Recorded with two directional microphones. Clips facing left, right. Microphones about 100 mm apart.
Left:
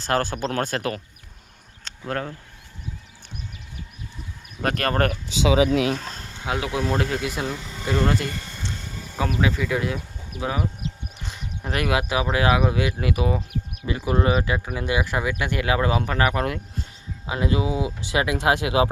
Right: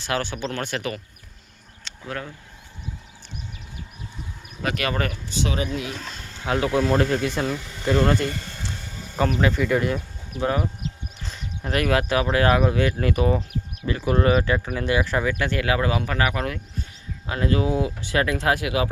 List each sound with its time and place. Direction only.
0.0 s speech: 45° left (ahead or behind)
1.8 s a sound: 50° left (ahead or behind)
4.6 s speech: 45° left (ahead or behind)
5.3 s speech: 90° left
6.4 s speech: 15° left (ahead or behind); by 16.6 s 30° left (ahead or behind)
17.2 s speech: 15° left (ahead or behind)